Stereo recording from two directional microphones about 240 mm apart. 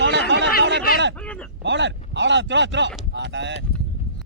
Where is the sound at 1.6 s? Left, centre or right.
Right.